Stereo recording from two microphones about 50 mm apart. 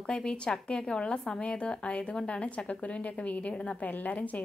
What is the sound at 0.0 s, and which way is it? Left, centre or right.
A woman's voice, centre.